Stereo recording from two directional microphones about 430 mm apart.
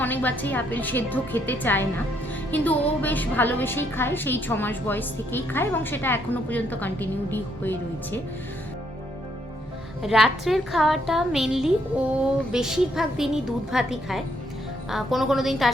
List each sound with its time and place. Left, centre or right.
0.0 s a woman's voice: centre
10.0 s a woman's voice: centre